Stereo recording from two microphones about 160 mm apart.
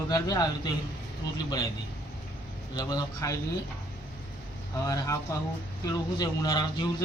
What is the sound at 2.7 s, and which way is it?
Speech, 25° left (ahead or behind).